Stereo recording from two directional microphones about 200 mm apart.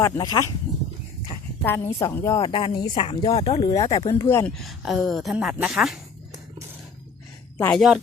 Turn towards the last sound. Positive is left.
turn(degrees=0)  # may be behind; listen again after turning